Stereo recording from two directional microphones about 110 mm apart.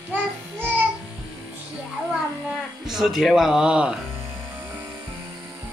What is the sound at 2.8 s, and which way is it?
Speech, 5° right (ahead or behind).